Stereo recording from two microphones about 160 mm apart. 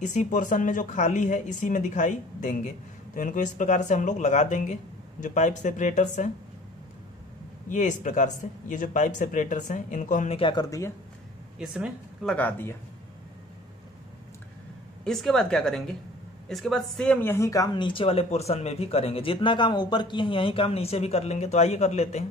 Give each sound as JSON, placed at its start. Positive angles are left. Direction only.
{"t": 0.0, "sound": "speech", "side_deg": 50}
{"t": 7.7, "sound": "speech", "side_deg": 50}
{"t": 10.3, "sound": "speech", "side_deg": 30}
{"t": 11.5, "sound": "speech", "side_deg": -5}
{"t": 12.3, "sound": "speech", "side_deg": 10}
{"t": 15.0, "sound": "speech", "side_deg": 0}